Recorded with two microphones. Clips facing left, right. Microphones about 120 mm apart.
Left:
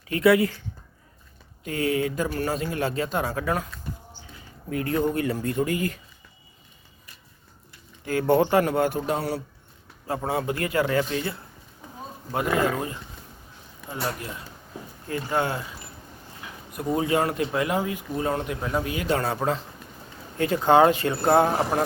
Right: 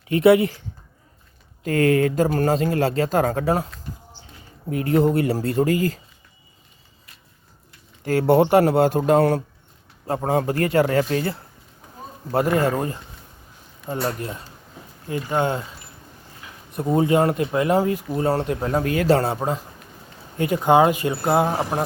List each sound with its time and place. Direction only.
0.1 s a man's voice: 25° right (ahead or behind)
1.6 s speech: 55° right (ahead or behind)
2.1 s speech: 40° right (ahead or behind)
4.7 s a man's voice: 30° right (ahead or behind)
8.2 s a man's voice: 25° right (ahead or behind)
9.0 s speech: 50° right (ahead or behind)
10.2 s speech: 40° right (ahead or behind)
15.3 s a man's voice: 20° right (ahead or behind)
16.7 s speech: 25° right (ahead or behind)
20.4 s speech: 15° right (ahead or behind)